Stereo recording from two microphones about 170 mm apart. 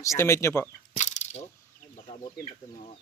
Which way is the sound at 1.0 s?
45° left (ahead or behind).